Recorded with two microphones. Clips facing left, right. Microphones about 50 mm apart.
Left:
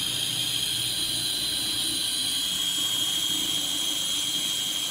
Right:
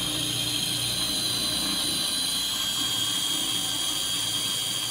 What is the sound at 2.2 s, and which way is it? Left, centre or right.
Jet engine, left.